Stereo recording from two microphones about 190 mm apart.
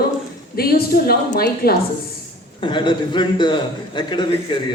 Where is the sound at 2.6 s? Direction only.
25° left (ahead or behind).